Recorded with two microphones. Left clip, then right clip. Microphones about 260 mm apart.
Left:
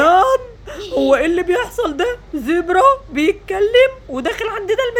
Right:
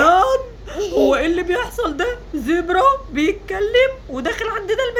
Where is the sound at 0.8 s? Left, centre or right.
Centre.